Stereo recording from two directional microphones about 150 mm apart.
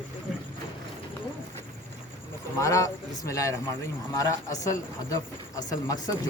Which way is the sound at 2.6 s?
20° left (ahead or behind).